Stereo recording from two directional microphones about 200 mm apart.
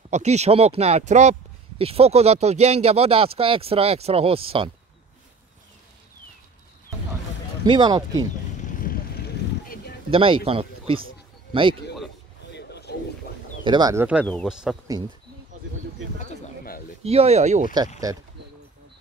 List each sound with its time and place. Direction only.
0.1 s speech: 35° right (ahead or behind)
7.6 s speech: 20° right (ahead or behind)
8.7 s vehicle: 45° left (ahead or behind)
10.1 s a man's voice: 25° right (ahead or behind)
12.5 s a sound: 55° left (ahead or behind)
13.7 s speech: 20° right (ahead or behind)
14.2 s speech: 5° left (ahead or behind)
16.2 s pigeon: 40° left (ahead or behind)
17.0 s speech: 30° right (ahead or behind)
18.1 s speech: 20° right (ahead or behind)